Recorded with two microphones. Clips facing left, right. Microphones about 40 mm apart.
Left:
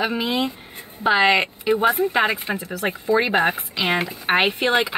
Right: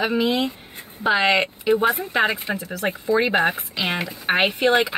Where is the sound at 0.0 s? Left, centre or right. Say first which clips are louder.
Right 1 dB; centre.